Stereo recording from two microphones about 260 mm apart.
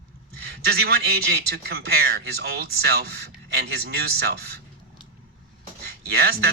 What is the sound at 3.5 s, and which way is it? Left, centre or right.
Speech, right.